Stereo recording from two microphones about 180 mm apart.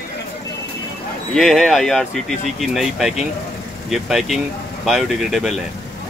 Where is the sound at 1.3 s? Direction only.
Centre (ahead or behind).